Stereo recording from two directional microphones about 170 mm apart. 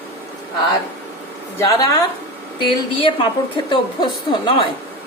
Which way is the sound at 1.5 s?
20° left (ahead or behind).